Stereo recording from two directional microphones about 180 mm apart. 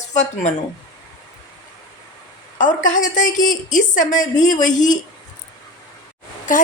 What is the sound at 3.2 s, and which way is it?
A woman's voice, 45° left (ahead or behind).